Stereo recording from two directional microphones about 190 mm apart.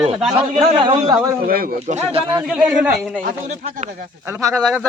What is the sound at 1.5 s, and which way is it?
Speech, 50° right (ahead or behind).